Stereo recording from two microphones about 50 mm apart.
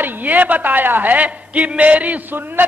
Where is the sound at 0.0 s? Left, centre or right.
Right.